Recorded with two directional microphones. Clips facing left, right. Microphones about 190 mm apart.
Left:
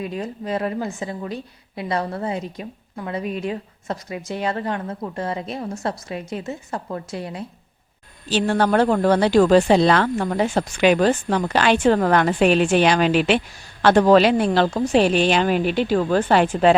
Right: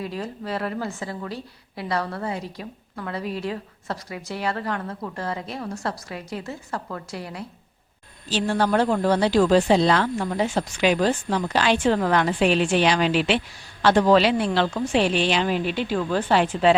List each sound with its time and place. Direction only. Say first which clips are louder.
0.0 s a woman's voice: left 3 dB; 20° left (ahead or behind)
8.3 s a woman's voice: left 3 dB; 60° left (ahead or behind)